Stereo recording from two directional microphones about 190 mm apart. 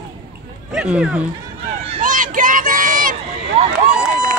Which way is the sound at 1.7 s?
35° right (ahead or behind).